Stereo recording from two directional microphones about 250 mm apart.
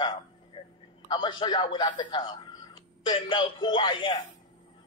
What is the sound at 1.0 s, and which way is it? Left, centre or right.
A man's voice, centre.